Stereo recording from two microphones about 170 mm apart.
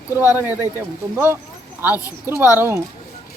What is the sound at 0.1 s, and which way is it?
Speech, 20° left (ahead or behind).